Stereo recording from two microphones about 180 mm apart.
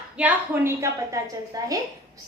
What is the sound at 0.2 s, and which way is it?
A woman's voice, 10° right (ahead or behind).